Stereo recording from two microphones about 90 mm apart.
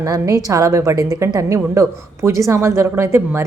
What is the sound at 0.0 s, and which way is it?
A woman's voice, 40° right (ahead or behind).